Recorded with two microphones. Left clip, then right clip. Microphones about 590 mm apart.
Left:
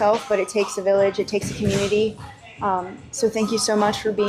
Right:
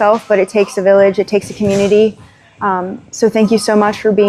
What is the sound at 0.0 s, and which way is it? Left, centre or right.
Speech, right.